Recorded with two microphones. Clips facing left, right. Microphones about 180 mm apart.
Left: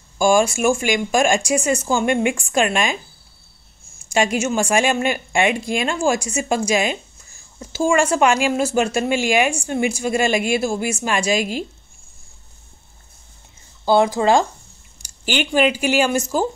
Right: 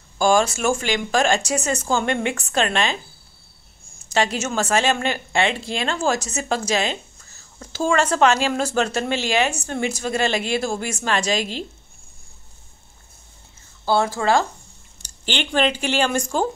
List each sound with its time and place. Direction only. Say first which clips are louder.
0.2 s speech: left 2 dB; 10° left (ahead or behind)
4.0 s speech: left 3 dB; 10° left (ahead or behind)
13.8 s speech: left 4 dB; 15° left (ahead or behind)